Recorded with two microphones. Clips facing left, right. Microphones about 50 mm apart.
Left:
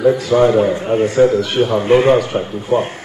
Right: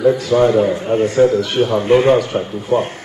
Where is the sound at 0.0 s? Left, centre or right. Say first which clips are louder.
Left 1 dB; centre.